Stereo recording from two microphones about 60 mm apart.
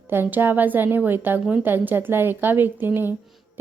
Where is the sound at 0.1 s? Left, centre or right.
Right.